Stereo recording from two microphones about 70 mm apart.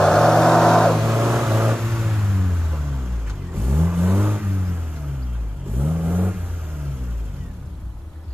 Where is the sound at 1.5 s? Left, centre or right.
Centre.